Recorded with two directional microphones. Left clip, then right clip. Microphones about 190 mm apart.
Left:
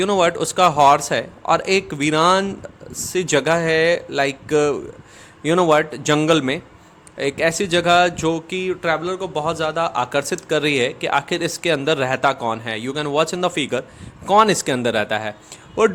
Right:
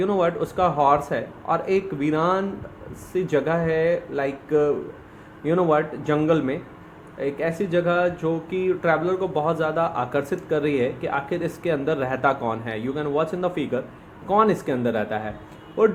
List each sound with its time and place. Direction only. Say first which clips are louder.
0.0 s speech: left 5 dB; 50° left (ahead or behind)